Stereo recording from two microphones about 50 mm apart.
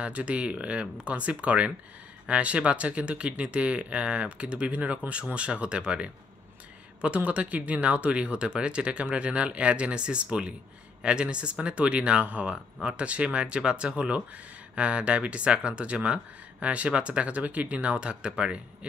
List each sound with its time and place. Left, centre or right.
0.0 s speech: right
7.2 s speech: right
17.9 s speech: centre